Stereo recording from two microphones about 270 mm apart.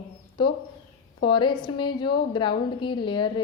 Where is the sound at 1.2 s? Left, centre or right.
Centre.